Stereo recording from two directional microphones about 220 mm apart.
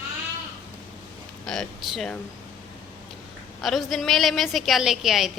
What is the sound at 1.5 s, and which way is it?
Speech, centre (ahead or behind).